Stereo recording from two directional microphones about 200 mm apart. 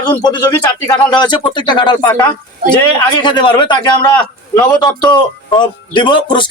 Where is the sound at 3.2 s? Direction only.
25° left (ahead or behind).